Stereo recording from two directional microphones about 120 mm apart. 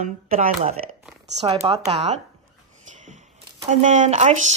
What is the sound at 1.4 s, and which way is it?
Speech, 55° right (ahead or behind).